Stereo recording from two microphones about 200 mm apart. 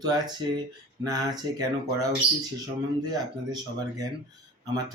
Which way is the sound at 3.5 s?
20° right (ahead or behind).